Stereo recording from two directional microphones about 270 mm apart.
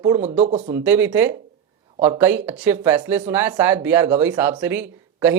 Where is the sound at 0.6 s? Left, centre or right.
Centre.